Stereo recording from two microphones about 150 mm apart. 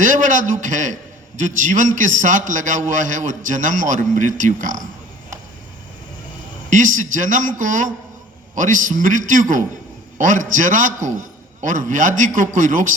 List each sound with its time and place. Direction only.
0.0 s a man's voice: 60° right (ahead or behind)
6.7 s a man's voice: 60° right (ahead or behind)